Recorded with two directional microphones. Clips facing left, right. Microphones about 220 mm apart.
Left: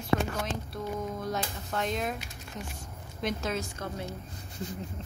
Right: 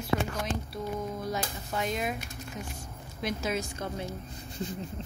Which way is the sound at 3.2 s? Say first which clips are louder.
Even; 5° right (ahead or behind).